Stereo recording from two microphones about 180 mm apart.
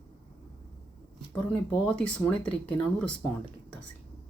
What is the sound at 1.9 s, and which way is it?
Speech, 5° left (ahead or behind).